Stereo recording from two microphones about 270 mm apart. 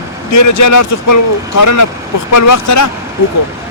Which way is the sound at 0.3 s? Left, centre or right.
Left.